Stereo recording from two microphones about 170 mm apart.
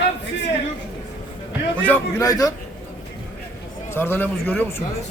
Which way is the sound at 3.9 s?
10° left (ahead or behind).